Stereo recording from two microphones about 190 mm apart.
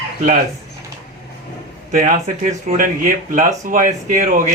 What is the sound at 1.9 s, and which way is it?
A man's voice, 40° right (ahead or behind).